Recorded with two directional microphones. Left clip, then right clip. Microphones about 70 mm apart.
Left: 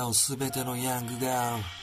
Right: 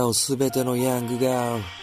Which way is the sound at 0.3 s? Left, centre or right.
Right.